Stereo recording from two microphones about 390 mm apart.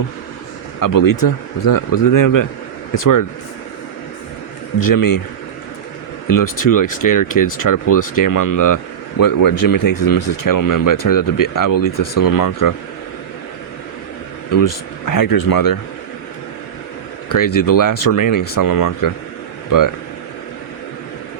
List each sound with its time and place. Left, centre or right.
0.8 s speech: left
4.9 s speech: left
6.2 s speech: left
14.5 s speech: left
17.2 s speech: left